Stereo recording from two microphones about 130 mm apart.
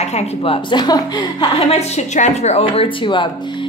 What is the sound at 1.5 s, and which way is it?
A woman's voice, 55° left (ahead or behind).